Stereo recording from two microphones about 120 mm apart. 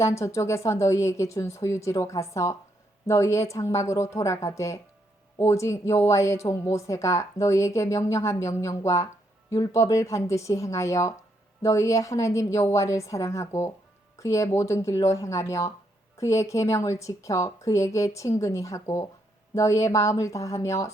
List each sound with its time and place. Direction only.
0.0 s speech: 25° left (ahead or behind)